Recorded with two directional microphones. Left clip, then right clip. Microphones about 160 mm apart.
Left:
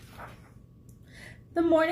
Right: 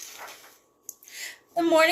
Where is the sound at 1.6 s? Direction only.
10° right (ahead or behind).